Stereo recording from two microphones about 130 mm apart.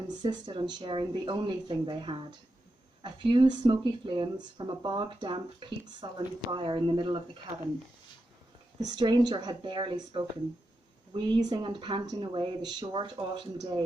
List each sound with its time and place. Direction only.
0.2 s speech: 35° right (ahead or behind)
8.8 s speech: 30° right (ahead or behind)